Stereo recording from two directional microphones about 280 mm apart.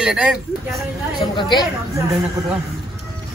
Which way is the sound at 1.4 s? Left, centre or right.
Centre.